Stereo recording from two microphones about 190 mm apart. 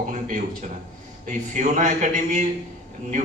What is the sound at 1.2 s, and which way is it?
A man's voice, 45° right (ahead or behind).